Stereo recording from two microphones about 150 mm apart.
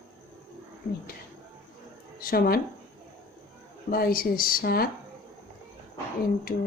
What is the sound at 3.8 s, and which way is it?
Speech, 80° left.